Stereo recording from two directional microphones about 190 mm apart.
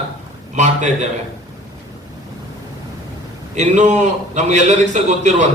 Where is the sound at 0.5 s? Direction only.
40° right (ahead or behind).